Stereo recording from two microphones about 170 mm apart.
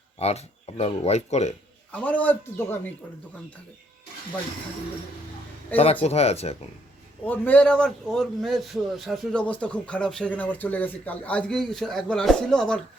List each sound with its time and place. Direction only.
0.2 s speech: 40° left (ahead or behind)
1.9 s a man's voice: 10° left (ahead or behind)
5.7 s speech: 35° left (ahead or behind)
7.3 s a man's voice: 10° left (ahead or behind)